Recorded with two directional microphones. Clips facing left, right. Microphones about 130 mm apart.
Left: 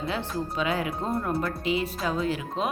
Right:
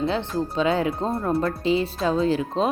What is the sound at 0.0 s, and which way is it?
Speech, 25° right (ahead or behind).